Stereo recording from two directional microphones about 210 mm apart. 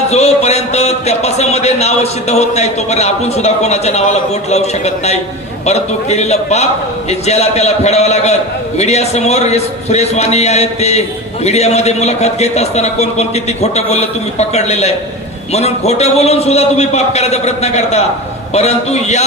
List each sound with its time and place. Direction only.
0.1 s speech: 30° left (ahead or behind)